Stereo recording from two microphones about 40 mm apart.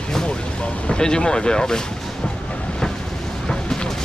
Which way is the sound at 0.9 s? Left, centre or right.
Left.